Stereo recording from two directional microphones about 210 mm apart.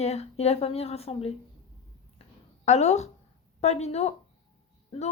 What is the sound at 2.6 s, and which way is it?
A woman's voice, 35° left (ahead or behind).